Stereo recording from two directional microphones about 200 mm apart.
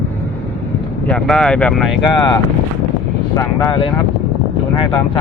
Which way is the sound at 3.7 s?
20° left (ahead or behind).